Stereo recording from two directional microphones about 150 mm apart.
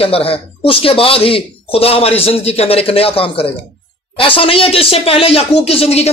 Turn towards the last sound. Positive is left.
turn(degrees=40)  # may be behind; listen again after turning